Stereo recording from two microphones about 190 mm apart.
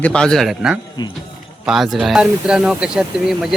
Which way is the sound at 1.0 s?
20° left (ahead or behind).